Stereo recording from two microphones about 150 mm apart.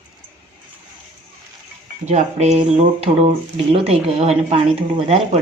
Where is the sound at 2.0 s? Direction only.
50° right (ahead or behind).